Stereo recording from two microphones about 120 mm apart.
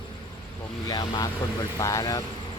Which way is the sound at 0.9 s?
35° left (ahead or behind).